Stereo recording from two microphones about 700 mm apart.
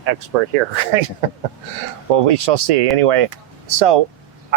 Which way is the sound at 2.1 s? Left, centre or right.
Right.